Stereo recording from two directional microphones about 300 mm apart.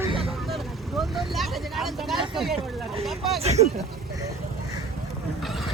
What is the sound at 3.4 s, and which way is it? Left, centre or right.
Speech, right.